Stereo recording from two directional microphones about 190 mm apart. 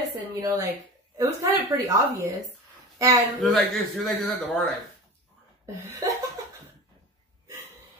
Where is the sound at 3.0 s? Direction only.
15° right (ahead or behind).